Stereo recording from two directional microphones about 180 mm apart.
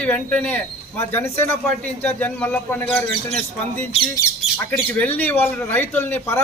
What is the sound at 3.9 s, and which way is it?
Speech, 30° left (ahead or behind).